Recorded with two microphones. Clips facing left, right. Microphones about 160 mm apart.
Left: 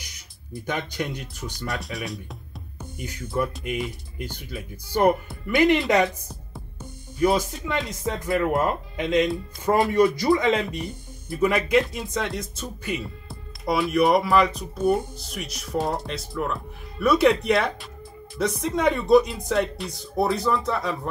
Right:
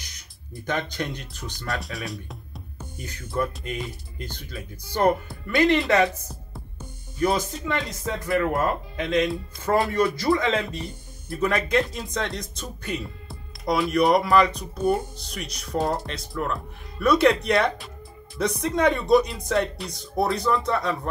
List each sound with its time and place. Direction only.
0.7 s speech: 10° left (ahead or behind)
1.7 s speech: centre (ahead or behind)
5.5 s speech: 15° left (ahead or behind)
11.2 s speech: 5° left (ahead or behind)